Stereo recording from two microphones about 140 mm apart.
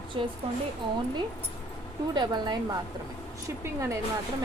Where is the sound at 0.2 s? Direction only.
40° right (ahead or behind).